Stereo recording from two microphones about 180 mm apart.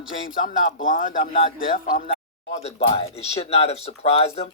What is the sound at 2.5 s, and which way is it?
Speech, 35° left (ahead or behind).